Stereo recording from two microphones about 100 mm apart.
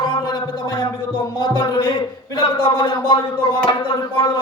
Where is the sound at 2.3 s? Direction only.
60° left (ahead or behind).